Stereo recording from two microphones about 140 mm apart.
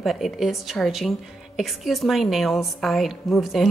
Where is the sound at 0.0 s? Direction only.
Centre (ahead or behind).